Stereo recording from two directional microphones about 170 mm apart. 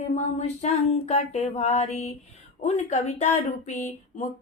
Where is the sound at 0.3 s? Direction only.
40° left (ahead or behind).